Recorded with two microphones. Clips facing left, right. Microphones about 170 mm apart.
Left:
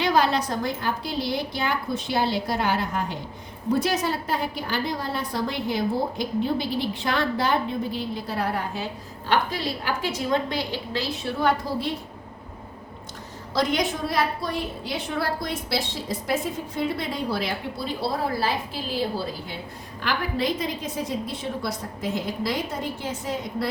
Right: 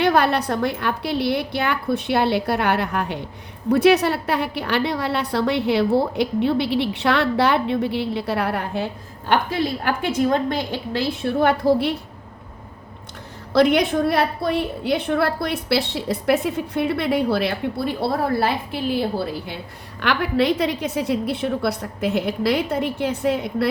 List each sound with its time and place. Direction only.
0.0 s a woman's voice: 60° right (ahead or behind)
13.5 s a woman's voice: 65° right (ahead or behind)
20.0 s a woman's voice: 70° right (ahead or behind)